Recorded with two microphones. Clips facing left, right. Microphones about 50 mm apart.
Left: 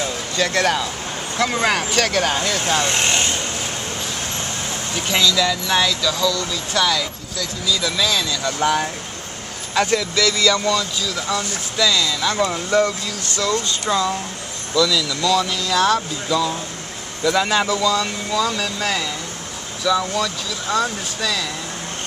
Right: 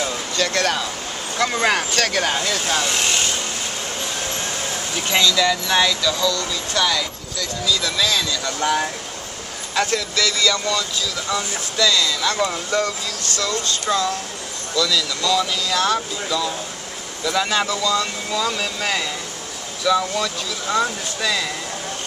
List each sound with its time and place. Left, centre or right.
0.4 s speech: centre
2.8 s vehicle: left
5.1 s speech: centre
9.8 s speech: centre
13.4 s speech: centre